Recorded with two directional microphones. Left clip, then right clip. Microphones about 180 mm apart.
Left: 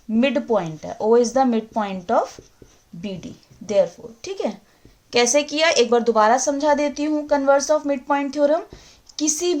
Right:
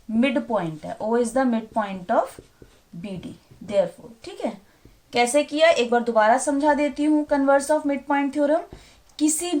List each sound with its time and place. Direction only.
0.2 s a woman's voice: 50° left (ahead or behind)
3.7 s a woman's voice: 50° left (ahead or behind)